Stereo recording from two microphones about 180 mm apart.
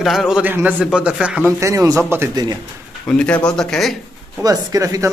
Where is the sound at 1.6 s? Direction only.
15° right (ahead or behind).